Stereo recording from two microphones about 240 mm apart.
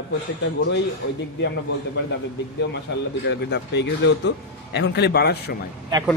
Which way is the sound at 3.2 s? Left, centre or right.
Left.